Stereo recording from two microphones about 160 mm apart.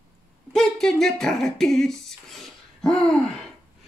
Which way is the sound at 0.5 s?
5° left (ahead or behind).